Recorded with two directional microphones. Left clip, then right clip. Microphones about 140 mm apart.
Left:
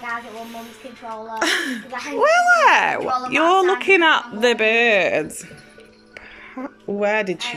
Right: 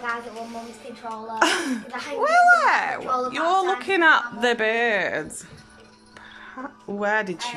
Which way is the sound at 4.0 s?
5° left (ahead or behind).